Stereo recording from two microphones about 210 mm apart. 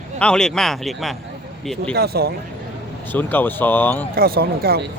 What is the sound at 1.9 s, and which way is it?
Speech, 50° right (ahead or behind).